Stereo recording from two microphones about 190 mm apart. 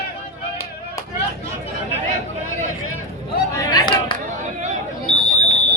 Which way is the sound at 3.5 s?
20° left (ahead or behind).